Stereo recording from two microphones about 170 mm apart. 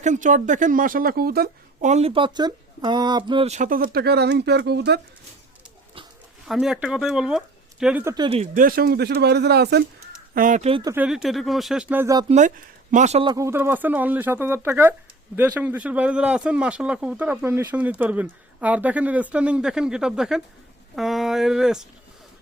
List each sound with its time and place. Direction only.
0.0 s speech: 45° right (ahead or behind); by 1.5 s 65° right (ahead or behind)
1.8 s speech: 40° right (ahead or behind); by 4.9 s 75° right (ahead or behind)
6.5 s speech: 5° right (ahead or behind)
8.0 s speech: 25° right (ahead or behind)
8.5 s speech: 60° right (ahead or behind)
10.3 s speech: 55° right (ahead or behind)
10.6 s speech: 35° right (ahead or behind)
10.8 s speech: 10° right (ahead or behind)
12.3 s speech: 45° right (ahead or behind)
13.2 s speech: 20° right (ahead or behind); by 21.8 s 5° right (ahead or behind)